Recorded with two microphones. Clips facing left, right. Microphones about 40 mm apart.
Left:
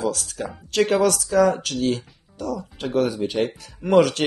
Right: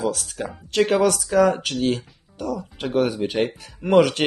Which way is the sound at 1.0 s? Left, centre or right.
Right.